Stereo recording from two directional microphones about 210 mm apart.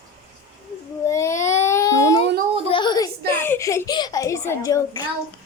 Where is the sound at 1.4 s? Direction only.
10° left (ahead or behind).